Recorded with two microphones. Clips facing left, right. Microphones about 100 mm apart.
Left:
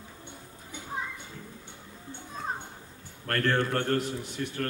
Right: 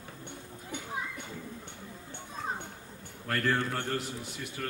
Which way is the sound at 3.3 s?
5° right (ahead or behind).